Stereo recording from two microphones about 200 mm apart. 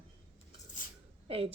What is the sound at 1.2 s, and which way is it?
Speech, 30° right (ahead or behind).